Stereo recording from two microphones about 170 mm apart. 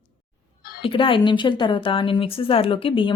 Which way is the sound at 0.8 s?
30° left (ahead or behind).